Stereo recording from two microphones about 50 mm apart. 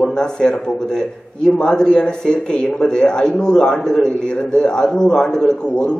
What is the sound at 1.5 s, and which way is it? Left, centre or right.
A man's voice, centre.